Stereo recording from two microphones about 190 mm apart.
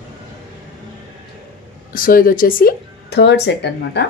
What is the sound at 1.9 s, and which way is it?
Speech, 50° left (ahead or behind).